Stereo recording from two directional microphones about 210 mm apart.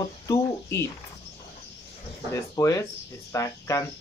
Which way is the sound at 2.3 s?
15° left (ahead or behind).